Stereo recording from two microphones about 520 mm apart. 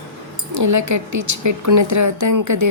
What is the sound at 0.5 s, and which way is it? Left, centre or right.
Speech, right.